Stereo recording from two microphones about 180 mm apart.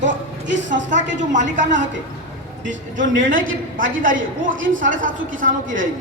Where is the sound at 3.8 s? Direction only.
50° right (ahead or behind).